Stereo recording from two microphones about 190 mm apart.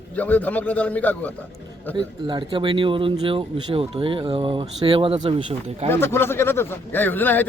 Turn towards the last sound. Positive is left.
turn(degrees=10)  # may be behind; listen again after turning